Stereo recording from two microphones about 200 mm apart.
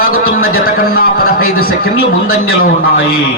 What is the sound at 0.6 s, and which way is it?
Speech, 50° left (ahead or behind).